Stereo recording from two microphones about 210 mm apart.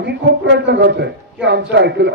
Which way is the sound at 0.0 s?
55° right (ahead or behind).